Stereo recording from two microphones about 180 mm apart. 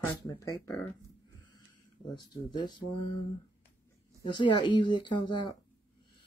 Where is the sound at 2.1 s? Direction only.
25° left (ahead or behind).